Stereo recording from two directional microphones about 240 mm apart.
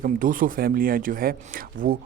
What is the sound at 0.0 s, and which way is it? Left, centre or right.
A man's voice, right.